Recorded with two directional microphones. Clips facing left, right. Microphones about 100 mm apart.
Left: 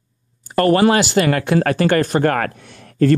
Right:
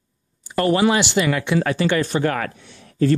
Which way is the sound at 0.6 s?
55° left (ahead or behind).